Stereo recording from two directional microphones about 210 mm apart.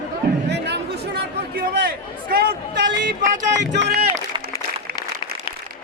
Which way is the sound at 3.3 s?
35° right (ahead or behind).